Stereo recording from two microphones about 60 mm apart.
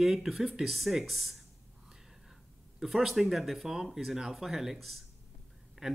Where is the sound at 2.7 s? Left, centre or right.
Centre.